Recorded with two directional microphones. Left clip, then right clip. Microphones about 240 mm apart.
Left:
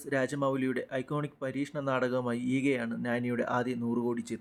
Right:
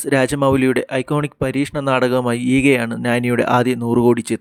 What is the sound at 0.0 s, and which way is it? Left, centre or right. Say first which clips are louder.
Speech: right 14 dB; right.